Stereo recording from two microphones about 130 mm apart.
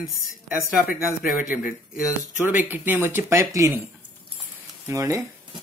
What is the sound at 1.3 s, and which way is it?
Speech, 10° right (ahead or behind).